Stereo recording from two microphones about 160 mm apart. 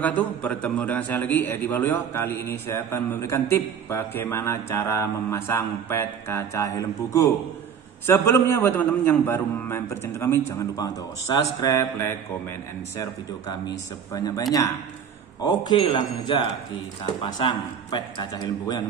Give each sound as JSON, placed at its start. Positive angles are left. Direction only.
{"t": 0.0, "sound": "a man's voice", "side_deg": 10}
{"t": 14.1, "sound": "a man's voice", "side_deg": 20}
{"t": 15.4, "sound": "a man's voice", "side_deg": 30}